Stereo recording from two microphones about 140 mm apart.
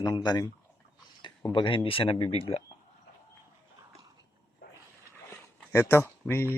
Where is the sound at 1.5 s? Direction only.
35° left (ahead or behind).